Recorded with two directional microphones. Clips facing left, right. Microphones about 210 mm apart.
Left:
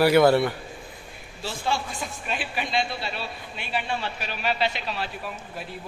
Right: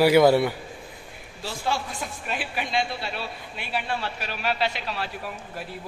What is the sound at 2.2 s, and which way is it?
A man's voice, 10° right (ahead or behind).